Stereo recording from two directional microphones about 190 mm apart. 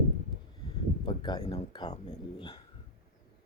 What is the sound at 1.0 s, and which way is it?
Speech, 25° left (ahead or behind).